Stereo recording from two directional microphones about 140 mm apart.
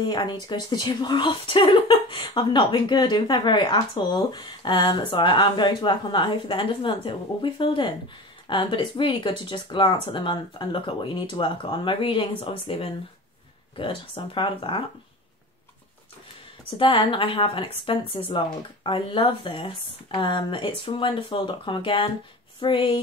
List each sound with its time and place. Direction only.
0.0 s speech: 35° left (ahead or behind)
16.7 s speech: 40° left (ahead or behind)